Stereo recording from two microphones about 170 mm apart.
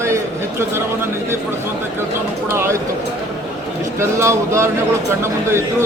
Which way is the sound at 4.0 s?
15° right (ahead or behind).